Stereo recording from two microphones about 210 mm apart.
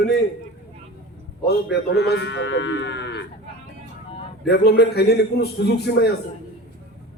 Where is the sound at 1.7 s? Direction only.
50° left (ahead or behind).